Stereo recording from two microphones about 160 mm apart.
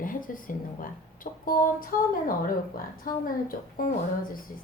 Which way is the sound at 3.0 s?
60° left (ahead or behind).